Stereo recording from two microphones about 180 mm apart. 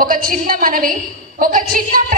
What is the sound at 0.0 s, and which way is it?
A woman's voice, 50° right (ahead or behind).